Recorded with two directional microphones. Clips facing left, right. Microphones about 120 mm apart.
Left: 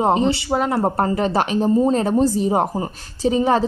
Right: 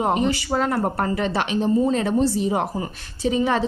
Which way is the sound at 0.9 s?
35° left (ahead or behind).